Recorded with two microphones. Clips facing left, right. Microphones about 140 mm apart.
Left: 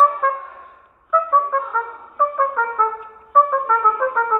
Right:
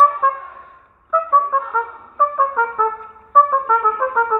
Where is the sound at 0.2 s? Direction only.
10° right (ahead or behind).